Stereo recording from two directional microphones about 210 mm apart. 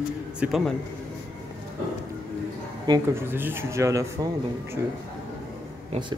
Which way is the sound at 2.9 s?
10° right (ahead or behind).